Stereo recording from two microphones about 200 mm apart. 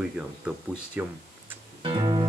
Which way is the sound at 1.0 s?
5° right (ahead or behind).